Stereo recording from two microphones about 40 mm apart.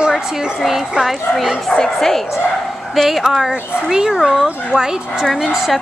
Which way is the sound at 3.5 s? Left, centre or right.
Right.